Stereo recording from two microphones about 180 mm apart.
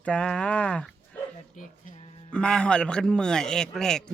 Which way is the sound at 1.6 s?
45° left (ahead or behind).